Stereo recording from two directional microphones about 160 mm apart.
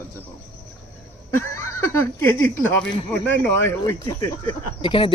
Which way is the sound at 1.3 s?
15° left (ahead or behind).